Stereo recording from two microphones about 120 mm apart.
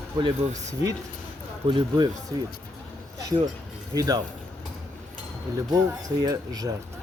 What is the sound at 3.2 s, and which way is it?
Speech, 30° right (ahead or behind).